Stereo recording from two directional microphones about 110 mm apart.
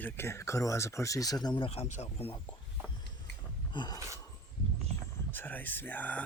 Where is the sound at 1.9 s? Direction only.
85° left.